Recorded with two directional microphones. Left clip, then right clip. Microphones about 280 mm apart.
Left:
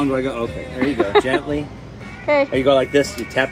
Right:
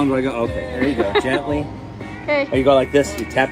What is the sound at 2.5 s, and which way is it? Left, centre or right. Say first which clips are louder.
Speech: right 1 dB; centre.